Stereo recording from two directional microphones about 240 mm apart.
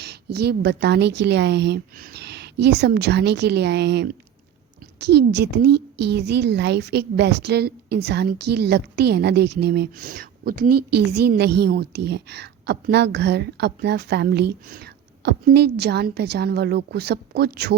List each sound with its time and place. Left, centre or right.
0.0 s a woman's voice: right